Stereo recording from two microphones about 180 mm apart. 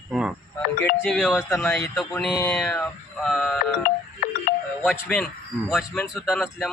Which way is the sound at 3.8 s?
50° left (ahead or behind).